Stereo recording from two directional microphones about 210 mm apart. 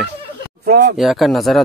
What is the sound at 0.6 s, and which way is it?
Speech, 55° right (ahead or behind).